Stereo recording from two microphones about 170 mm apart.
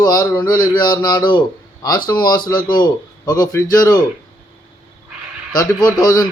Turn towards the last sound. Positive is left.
turn(degrees=20)  # may be behind; listen again after turning